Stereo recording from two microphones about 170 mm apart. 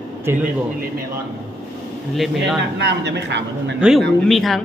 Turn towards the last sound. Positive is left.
turn(degrees=0)  # may be behind; listen again after turning